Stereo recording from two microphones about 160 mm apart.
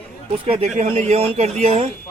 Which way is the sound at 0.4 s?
40° right (ahead or behind).